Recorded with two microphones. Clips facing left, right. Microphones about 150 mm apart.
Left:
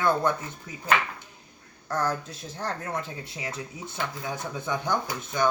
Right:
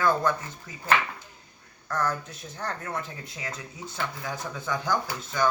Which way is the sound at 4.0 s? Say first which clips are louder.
Left 1 dB; 20° left (ahead or behind).